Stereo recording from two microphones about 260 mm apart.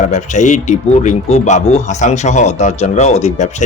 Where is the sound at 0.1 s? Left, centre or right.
Left.